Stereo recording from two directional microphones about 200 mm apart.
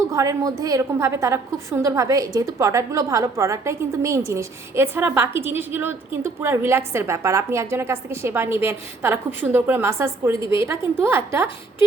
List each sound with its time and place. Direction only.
0.1 s a woman's voice: 15° right (ahead or behind)